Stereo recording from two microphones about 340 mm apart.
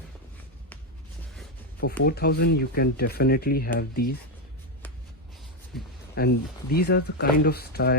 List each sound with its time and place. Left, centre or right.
1.8 s speech: left
6.1 s speech: left